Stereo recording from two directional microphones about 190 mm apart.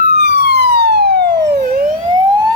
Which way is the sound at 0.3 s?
60° right (ahead or behind).